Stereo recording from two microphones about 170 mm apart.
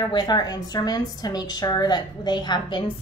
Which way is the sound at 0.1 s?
25° left (ahead or behind).